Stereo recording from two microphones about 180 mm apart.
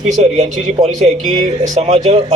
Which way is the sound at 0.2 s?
40° right (ahead or behind).